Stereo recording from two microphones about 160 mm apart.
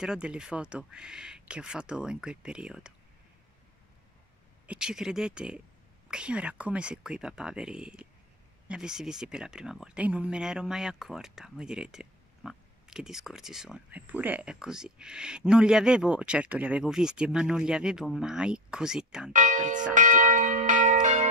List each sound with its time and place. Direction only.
0.0 s speech: 5° right (ahead or behind)
4.6 s speech: 5° right (ahead or behind)
19.3 s speech: 55° right (ahead or behind)
19.9 s church bell: 55° right (ahead or behind)